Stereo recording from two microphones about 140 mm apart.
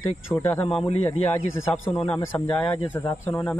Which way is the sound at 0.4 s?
15° left (ahead or behind).